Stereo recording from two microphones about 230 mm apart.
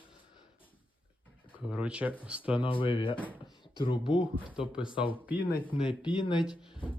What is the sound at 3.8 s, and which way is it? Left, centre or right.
Speech, left.